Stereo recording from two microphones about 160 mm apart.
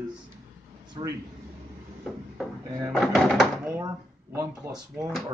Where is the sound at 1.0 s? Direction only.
30° right (ahead or behind).